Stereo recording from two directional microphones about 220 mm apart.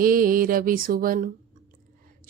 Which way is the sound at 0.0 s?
40° right (ahead or behind).